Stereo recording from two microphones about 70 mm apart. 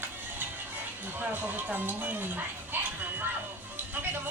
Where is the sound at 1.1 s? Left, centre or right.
Right.